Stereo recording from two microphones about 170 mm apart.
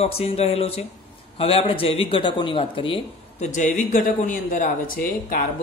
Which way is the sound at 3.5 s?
45° left (ahead or behind).